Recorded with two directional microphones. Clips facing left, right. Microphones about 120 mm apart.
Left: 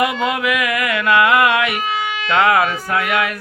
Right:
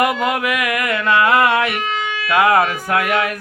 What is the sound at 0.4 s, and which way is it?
Mantra, 45° right (ahead or behind).